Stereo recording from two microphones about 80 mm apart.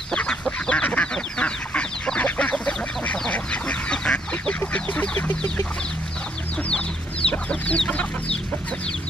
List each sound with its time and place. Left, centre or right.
0.1 s chicken: centre
4.6 s fowl: centre
7.2 s chicken: centre